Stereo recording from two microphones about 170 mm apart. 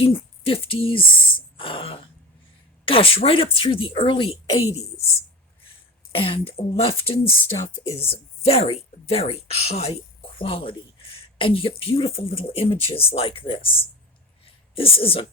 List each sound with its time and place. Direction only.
0.0 s a woman's voice: 35° left (ahead or behind)
6.1 s a woman's voice: 30° left (ahead or behind)
14.8 s a woman's voice: 35° left (ahead or behind)